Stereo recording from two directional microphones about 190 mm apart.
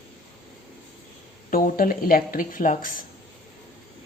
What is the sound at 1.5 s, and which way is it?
Speech, 50° left (ahead or behind).